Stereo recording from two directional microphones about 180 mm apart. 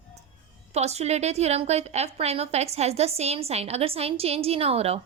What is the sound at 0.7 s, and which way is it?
A woman's voice, 35° right (ahead or behind).